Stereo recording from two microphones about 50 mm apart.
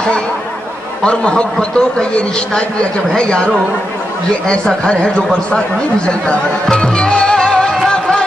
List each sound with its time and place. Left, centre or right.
1.0 s speech: centre
7.7 s music: centre